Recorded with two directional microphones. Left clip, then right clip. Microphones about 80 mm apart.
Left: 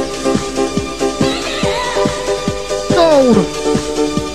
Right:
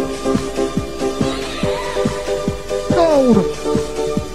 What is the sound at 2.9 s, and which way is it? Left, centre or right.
Music, left.